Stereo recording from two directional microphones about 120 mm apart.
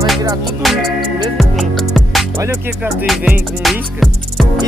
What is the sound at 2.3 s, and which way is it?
Music, 25° right (ahead or behind).